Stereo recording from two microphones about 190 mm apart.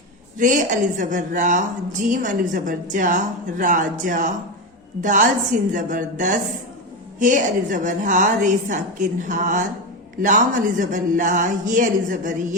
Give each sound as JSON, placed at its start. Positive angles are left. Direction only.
{"t": 0.3, "sound": "a woman's voice", "side_deg": -40}